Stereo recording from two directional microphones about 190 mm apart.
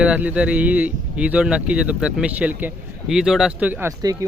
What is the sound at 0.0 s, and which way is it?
A man's voice, 5° right (ahead or behind).